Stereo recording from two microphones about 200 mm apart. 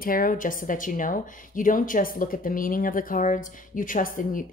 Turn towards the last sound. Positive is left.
turn(degrees=40)  # may be behind; listen again after turning